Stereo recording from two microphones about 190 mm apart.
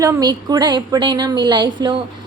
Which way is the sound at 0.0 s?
20° right (ahead or behind).